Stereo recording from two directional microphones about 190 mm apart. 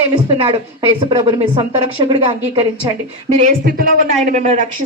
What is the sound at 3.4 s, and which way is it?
Speech, 45° right (ahead or behind).